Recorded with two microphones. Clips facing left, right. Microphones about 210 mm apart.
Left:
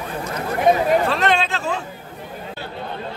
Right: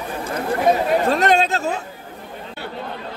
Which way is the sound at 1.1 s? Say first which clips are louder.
Right 3 dB; 40° right (ahead or behind).